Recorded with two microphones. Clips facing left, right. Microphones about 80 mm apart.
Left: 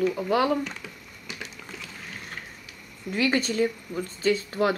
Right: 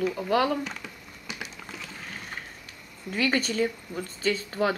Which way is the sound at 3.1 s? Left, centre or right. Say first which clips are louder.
Left 2 dB; centre.